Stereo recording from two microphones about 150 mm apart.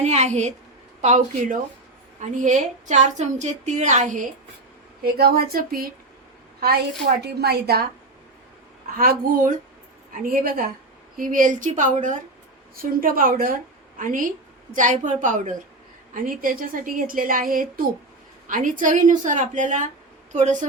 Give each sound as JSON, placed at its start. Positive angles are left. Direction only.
{"t": 0.0, "sound": "a woman's voice", "side_deg": -50}
{"t": 5.0, "sound": "a woman's voice", "side_deg": -90}
{"t": 7.2, "sound": "a woman's voice", "side_deg": -90}
{"t": 9.0, "sound": "a woman's voice", "side_deg": -75}
{"t": 11.2, "sound": "a woman's voice", "side_deg": -60}
{"t": 12.7, "sound": "a woman's voice", "side_deg": -70}
{"t": 14.0, "sound": "a woman's voice", "side_deg": -60}
{"t": 16.1, "sound": "a woman's voice", "side_deg": -70}